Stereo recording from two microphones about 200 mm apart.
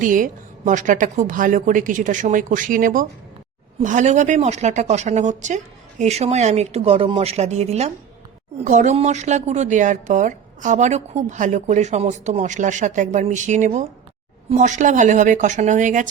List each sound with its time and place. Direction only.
0.0 s speech: 40° right (ahead or behind)